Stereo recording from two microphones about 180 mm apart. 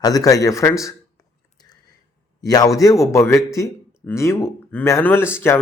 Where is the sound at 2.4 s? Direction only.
20° left (ahead or behind).